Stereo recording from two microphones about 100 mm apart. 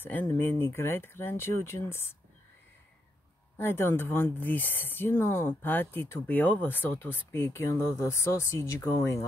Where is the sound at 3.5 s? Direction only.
25° left (ahead or behind).